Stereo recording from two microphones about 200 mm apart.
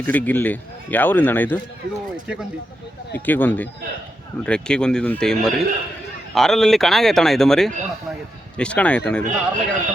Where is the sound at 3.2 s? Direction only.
10° left (ahead or behind).